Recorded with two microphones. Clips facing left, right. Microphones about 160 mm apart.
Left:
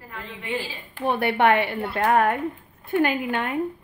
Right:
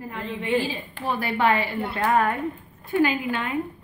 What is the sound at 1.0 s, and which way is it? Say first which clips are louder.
Speech: left 3 dB; 60° left (ahead or behind).